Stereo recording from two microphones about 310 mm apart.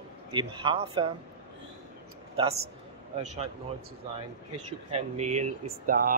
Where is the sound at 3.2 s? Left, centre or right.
Right.